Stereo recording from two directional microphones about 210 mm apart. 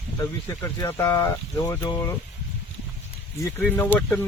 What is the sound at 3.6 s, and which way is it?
Speech, 5° left (ahead or behind).